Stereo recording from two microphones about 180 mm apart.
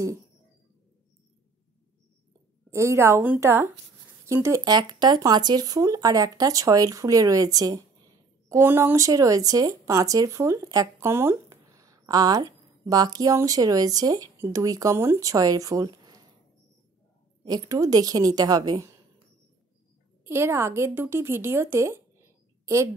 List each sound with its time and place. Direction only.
2.7 s a woman's voice: 15° right (ahead or behind)
17.5 s speech: 20° right (ahead or behind)
20.2 s speech: 15° right (ahead or behind)